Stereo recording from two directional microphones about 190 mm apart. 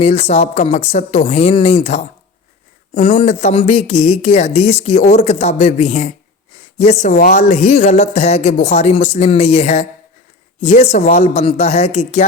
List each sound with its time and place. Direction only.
0.0 s speech: 35° left (ahead or behind)